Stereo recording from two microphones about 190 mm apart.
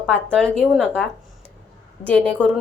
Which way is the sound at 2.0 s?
5° left (ahead or behind).